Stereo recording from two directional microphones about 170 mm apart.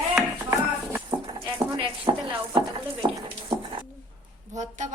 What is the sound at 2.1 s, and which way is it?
Chopping, 20° right (ahead or behind).